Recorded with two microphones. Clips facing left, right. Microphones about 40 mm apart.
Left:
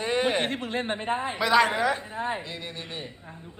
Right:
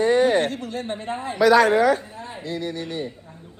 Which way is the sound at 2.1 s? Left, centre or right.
Left.